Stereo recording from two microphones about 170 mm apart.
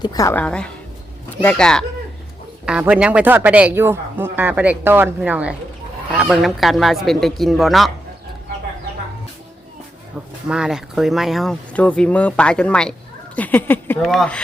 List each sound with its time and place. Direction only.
0.0 s a woman's voice: 20° left (ahead or behind)
0.3 s speech: 5° left (ahead or behind)
2.6 s speech: 5° right (ahead or behind)
10.4 s speech: 5° right (ahead or behind); by 14.0 s 10° left (ahead or behind)
14.0 s speech: centre (ahead or behind)